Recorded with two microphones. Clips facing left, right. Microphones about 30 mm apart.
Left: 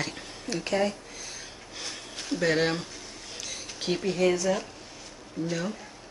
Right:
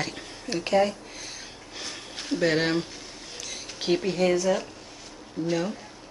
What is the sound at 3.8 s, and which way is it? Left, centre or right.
Speech, centre.